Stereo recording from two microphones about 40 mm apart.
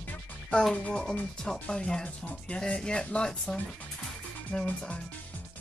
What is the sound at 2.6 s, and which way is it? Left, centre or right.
Speech, left.